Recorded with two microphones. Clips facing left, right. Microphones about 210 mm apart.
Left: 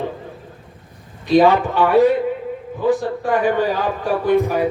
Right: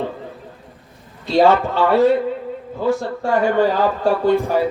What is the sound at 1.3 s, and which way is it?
Speech, 15° left (ahead or behind).